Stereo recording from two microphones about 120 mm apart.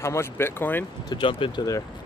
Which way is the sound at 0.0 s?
20° left (ahead or behind).